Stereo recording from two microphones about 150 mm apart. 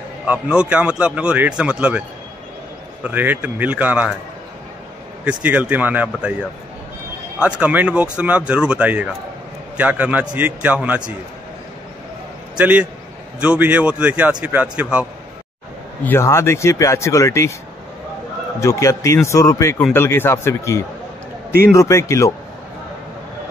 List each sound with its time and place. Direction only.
0.3 s speech: 10° right (ahead or behind)
5.2 s speech: 10° right (ahead or behind)
7.4 s speech: 10° right (ahead or behind)
12.5 s a man's voice: 10° right (ahead or behind)
16.0 s speech: 15° left (ahead or behind)
18.6 s speech: 20° left (ahead or behind)